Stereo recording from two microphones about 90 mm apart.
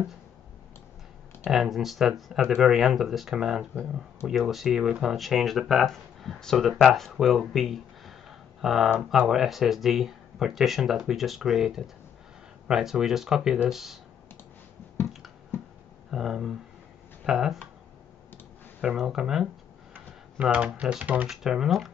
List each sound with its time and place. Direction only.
1.5 s speech: centre (ahead or behind)
16.1 s speech: 5° right (ahead or behind)
18.8 s speech: 5° right (ahead or behind)
21.3 s speech: 5° right (ahead or behind)